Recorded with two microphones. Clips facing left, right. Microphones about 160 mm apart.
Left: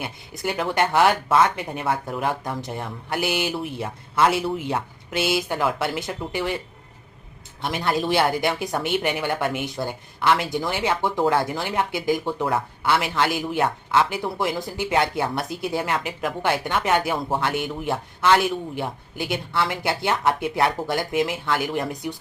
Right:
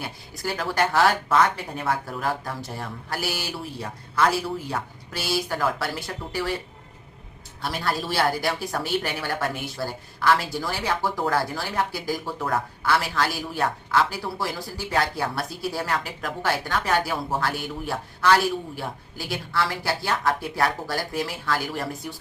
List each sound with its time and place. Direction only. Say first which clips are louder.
0.4 s speech: left 2 dB; 20° left (ahead or behind)
7.6 s speech: left 4 dB; 20° left (ahead or behind)